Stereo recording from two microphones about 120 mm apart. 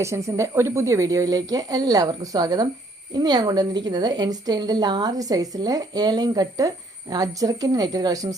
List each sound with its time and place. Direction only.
0.0 s a woman's voice: 25° right (ahead or behind)